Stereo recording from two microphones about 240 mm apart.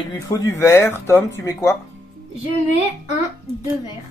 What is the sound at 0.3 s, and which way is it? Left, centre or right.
Speech, centre.